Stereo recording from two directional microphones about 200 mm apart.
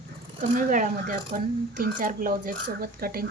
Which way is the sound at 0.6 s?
40° right (ahead or behind).